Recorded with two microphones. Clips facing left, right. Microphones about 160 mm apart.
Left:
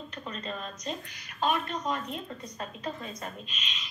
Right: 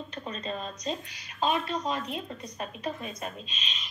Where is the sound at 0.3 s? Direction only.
20° right (ahead or behind).